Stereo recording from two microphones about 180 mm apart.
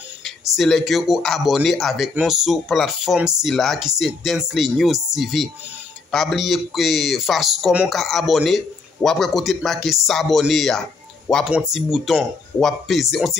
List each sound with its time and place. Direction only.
0.2 s speech: centre (ahead or behind)